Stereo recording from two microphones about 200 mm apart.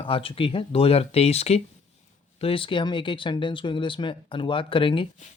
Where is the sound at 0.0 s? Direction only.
25° left (ahead or behind).